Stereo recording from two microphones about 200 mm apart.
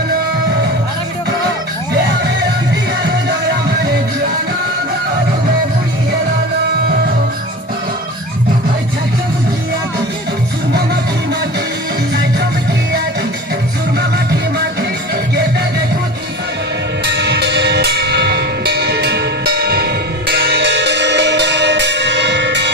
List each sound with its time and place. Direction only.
14.8 s music: 55° right (ahead or behind)
17.1 s music: 60° right (ahead or behind)